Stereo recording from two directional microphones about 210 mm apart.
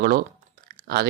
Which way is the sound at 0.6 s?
45° right (ahead or behind).